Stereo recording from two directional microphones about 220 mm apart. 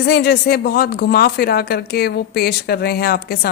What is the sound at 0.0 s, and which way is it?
Speech, 45° left (ahead or behind).